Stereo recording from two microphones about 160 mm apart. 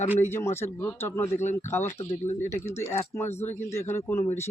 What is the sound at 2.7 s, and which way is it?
Speech, 45° left (ahead or behind).